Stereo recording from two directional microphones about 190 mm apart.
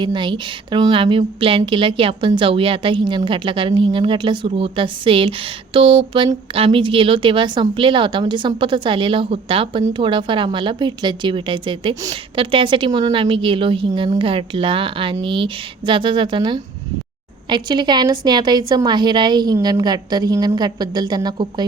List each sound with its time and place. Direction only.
0.0 s a woman's voice: 25° right (ahead or behind)